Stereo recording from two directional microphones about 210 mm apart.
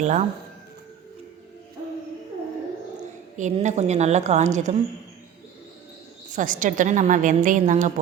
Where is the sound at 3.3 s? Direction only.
35° right (ahead or behind).